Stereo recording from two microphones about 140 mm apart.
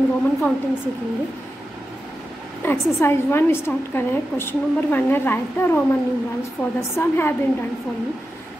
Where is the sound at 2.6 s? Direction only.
15° left (ahead or behind).